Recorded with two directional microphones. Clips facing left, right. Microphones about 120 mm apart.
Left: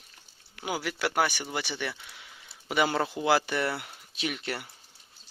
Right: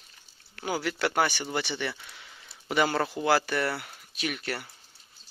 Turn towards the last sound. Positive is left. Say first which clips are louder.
# even
turn(degrees=20)  # may be behind; listen again after turning